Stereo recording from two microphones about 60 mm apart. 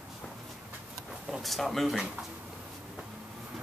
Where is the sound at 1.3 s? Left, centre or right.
Centre.